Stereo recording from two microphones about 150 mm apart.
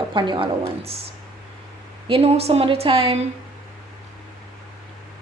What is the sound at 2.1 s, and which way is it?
A woman's voice, 40° right (ahead or behind).